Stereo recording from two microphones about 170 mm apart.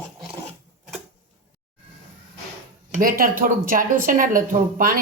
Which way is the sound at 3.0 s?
60° right (ahead or behind).